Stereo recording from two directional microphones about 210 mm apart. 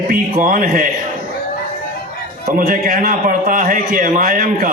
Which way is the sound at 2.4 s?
45° right (ahead or behind).